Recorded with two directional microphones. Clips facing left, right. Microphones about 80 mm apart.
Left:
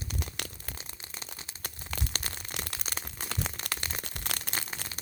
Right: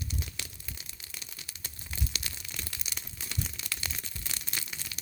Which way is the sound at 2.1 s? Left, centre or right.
Left.